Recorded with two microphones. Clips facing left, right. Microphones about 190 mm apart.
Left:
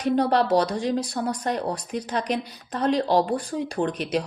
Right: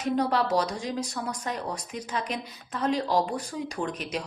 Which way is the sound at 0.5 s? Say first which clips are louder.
Left 6 dB; 35° left (ahead or behind).